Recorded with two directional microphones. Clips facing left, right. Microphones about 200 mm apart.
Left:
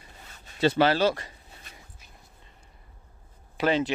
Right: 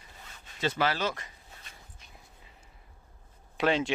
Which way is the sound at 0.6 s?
30° left (ahead or behind).